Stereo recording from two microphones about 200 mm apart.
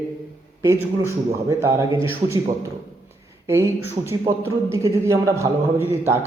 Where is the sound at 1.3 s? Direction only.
15° right (ahead or behind).